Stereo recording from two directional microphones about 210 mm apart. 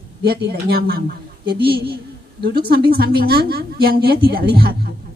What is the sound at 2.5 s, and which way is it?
A woman's voice, 50° right (ahead or behind).